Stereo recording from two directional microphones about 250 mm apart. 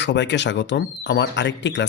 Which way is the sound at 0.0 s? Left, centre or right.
Left.